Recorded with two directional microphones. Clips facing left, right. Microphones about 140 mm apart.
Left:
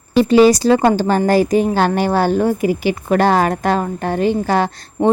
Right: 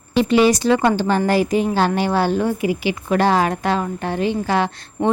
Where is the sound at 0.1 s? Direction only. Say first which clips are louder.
Left 4 dB; 40° left (ahead or behind).